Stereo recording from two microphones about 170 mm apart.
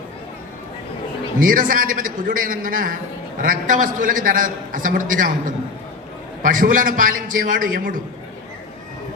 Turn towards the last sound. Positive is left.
turn(degrees=-55)  # may be behind; listen again after turning